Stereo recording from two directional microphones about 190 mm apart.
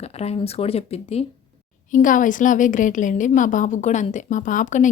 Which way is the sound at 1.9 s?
45° left (ahead or behind).